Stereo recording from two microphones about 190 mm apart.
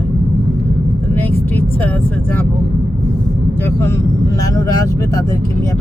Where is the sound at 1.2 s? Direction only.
10° left (ahead or behind).